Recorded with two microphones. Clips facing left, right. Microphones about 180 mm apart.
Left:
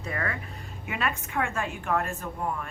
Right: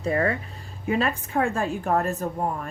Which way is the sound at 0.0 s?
30° right (ahead or behind).